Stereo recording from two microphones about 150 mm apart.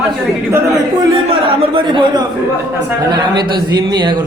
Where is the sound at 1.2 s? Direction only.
40° right (ahead or behind).